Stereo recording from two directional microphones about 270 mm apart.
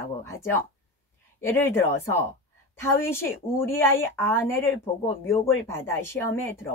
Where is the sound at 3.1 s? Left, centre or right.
Centre.